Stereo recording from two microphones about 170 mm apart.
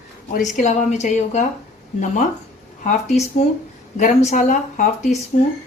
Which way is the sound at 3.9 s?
45° left (ahead or behind).